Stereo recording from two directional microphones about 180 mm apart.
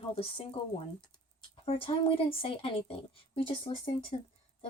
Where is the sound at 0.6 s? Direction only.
30° left (ahead or behind).